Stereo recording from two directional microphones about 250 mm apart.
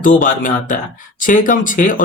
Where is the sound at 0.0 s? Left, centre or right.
Left.